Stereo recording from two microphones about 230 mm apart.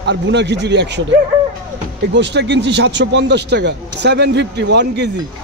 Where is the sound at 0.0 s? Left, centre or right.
Right.